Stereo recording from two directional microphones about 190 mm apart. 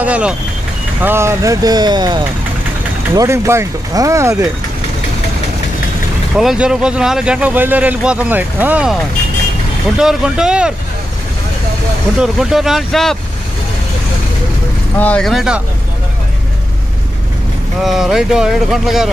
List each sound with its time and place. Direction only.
0.0 s speech: 5° right (ahead or behind)
6.3 s speech: 5° right (ahead or behind)
9.9 s speech: 5° right (ahead or behind)
12.2 s speech: centre (ahead or behind)
15.0 s speech: 5° left (ahead or behind)
17.8 s speech: centre (ahead or behind)